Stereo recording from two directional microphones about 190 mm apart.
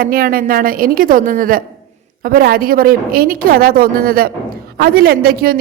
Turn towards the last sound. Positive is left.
turn(degrees=-50)  # may be behind; listen again after turning